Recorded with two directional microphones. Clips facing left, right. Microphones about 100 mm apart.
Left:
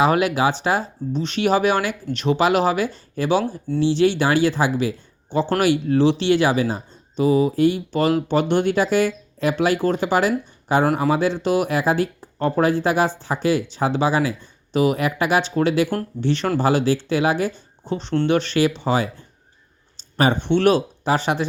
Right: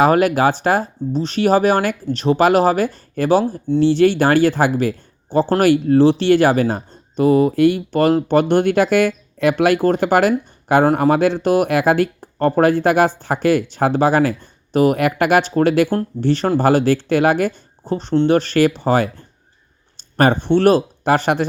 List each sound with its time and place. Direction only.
0.0 s speech: 45° right (ahead or behind)
16.2 s speech: 40° right (ahead or behind)
17.8 s speech: 45° right (ahead or behind)
20.0 s a sound: 55° right (ahead or behind)
20.5 s speech: 40° right (ahead or behind)
21.1 s speech: 55° right (ahead or behind)